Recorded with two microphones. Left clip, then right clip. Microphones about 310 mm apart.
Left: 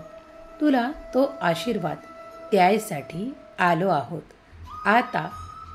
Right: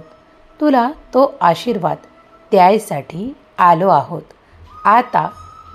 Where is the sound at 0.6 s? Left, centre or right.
Centre.